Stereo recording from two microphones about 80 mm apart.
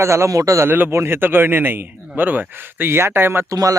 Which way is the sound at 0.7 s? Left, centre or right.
Right.